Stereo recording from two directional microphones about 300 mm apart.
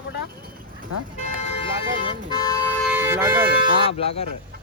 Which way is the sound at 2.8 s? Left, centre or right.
Centre.